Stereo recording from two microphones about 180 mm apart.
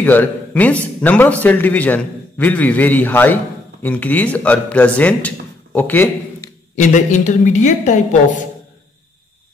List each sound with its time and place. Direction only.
0.0 s a man's voice: 10° left (ahead or behind)
6.7 s a woman's voice: 45° left (ahead or behind)